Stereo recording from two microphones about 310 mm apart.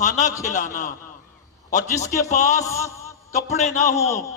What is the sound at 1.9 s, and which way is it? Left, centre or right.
Speech, centre.